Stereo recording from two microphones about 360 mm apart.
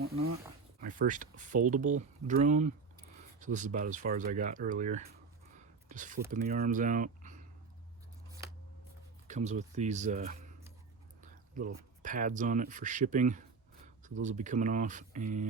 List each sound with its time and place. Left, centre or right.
0.8 s speech: right
5.5 s a sound: right
6.3 s speech: right
9.2 s speech: centre
11.2 s a sound: right
12.0 s speech: right